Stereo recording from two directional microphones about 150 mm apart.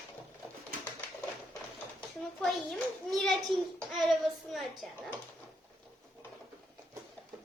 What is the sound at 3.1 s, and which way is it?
Speech, 5° left (ahead or behind).